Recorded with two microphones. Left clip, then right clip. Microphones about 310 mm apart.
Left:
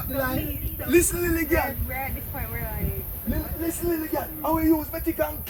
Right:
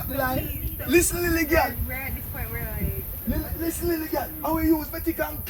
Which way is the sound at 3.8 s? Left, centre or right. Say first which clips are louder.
Even; centre.